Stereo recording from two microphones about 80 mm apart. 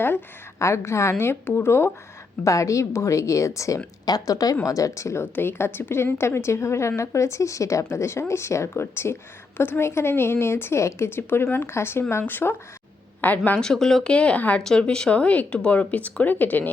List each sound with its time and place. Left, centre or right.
0.6 s a woman's voice: left
2.4 s a woman's voice: left
4.0 s speech: left
5.2 s a woman's voice: left
13.6 s speech: centre; by 16.6 s left